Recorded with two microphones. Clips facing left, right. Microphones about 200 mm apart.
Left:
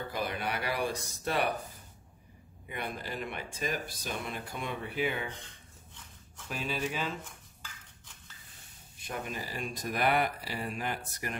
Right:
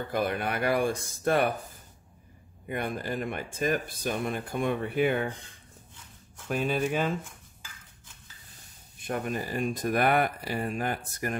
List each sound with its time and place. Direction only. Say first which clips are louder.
0.1 s speech: right 7 dB; 50° right (ahead or behind)
2.7 s speech: right 7 dB; 50° right (ahead or behind)
6.5 s speech: right 7 dB; 50° right (ahead or behind)
9.0 s speech: right 7 dB; 50° right (ahead or behind)